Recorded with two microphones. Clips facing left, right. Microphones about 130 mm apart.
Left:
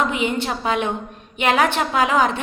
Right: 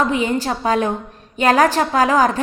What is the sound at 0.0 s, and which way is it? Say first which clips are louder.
A woman's voice: right 3 dB; 35° right (ahead or behind).